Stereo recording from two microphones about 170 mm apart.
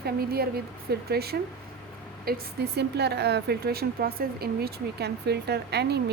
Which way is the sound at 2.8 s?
75° right (ahead or behind).